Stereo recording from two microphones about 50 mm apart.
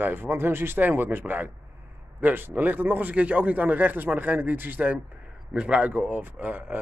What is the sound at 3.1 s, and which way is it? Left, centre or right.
A man's voice, right.